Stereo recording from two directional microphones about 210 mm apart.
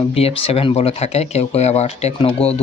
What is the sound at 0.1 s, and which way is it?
Speech, 25° left (ahead or behind).